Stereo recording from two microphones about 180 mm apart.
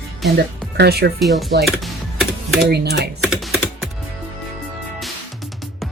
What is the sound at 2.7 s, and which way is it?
Speech, 65° right (ahead or behind).